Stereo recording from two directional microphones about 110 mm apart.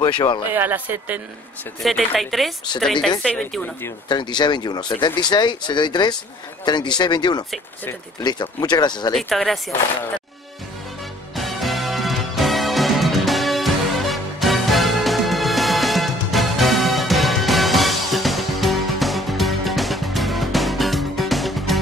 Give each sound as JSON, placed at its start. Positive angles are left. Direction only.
{"t": 0.0, "sound": "speech", "side_deg": 45}
{"t": 0.5, "sound": "speech", "side_deg": -20}
{"t": 1.8, "sound": "speech", "side_deg": 0}
{"t": 4.1, "sound": "speech", "side_deg": 40}
{"t": 9.1, "sound": "speech", "side_deg": 0}
{"t": 11.3, "sound": "music", "side_deg": 0}